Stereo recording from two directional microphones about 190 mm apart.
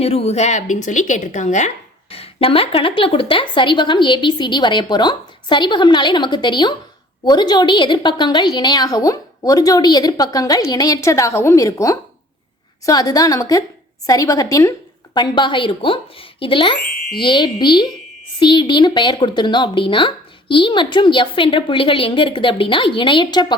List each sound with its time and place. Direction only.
0.0 s a woman's voice: 30° left (ahead or behind)